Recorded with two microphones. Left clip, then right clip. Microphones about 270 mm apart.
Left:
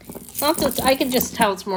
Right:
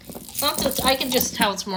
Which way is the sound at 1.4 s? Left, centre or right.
Centre.